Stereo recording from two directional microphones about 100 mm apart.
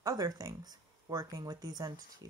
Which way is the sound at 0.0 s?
40° right (ahead or behind).